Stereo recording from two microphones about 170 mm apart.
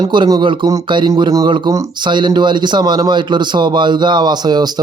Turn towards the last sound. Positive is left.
turn(degrees=-25)  # may be behind; listen again after turning